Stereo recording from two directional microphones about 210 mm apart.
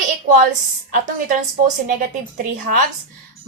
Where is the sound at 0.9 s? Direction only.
40° right (ahead or behind).